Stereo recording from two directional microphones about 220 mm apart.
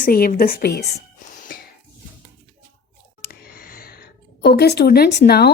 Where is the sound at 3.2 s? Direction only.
40° left (ahead or behind).